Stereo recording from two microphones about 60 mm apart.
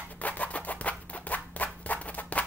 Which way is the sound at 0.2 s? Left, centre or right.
Left.